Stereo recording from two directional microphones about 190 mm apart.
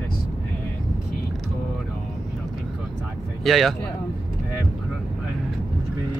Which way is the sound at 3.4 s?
Centre (ahead or behind).